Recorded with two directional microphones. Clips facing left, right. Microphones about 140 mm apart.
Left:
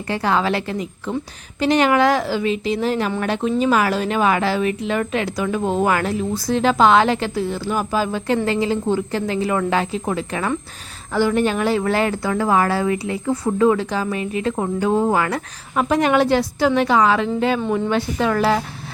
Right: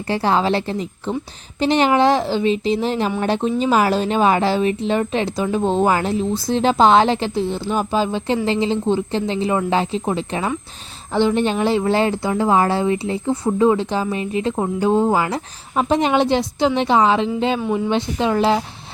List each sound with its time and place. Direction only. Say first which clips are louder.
0.1 s a woman's voice: right 2 dB; 30° right (ahead or behind)
17.6 s a woman's voice: even; 5° right (ahead or behind)
17.8 s a woman's voice: even; 20° right (ahead or behind)